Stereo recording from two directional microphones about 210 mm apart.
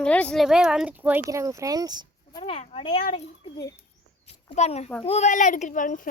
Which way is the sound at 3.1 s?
25° left (ahead or behind).